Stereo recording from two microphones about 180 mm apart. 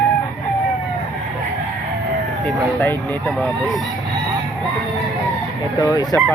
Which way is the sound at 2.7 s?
10° left (ahead or behind).